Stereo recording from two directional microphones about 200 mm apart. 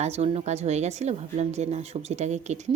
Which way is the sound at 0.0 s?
30° right (ahead or behind).